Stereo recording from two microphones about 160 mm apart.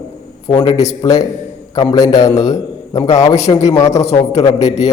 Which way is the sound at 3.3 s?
45° left (ahead or behind).